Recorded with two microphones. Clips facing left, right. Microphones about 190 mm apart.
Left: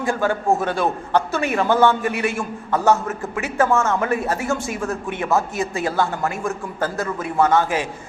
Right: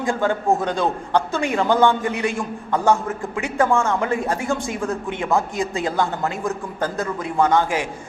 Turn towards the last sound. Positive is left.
turn(degrees=-15)  # may be behind; listen again after turning